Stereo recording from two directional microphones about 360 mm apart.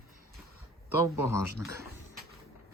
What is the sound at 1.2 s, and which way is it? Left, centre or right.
Speech, left.